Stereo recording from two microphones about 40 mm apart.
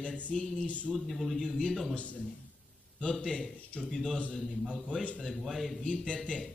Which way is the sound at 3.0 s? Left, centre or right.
Centre.